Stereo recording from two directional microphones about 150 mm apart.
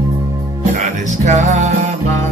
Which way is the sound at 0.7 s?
50° right (ahead or behind).